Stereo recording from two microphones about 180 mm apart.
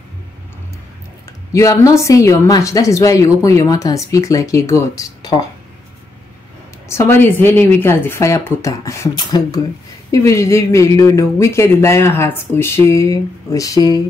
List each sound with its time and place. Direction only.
1.5 s a woman's voice: 15° left (ahead or behind)
6.9 s a woman's voice: 15° left (ahead or behind)